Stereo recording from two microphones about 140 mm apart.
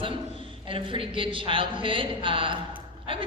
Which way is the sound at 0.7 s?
40° right (ahead or behind).